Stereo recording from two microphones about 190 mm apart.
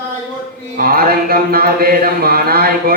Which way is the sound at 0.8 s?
50° right (ahead or behind).